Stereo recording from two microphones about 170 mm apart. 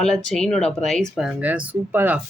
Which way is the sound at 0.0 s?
5° left (ahead or behind).